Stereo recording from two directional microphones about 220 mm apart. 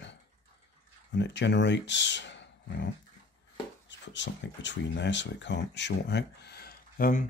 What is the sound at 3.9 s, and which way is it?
Speech, 55° left (ahead or behind).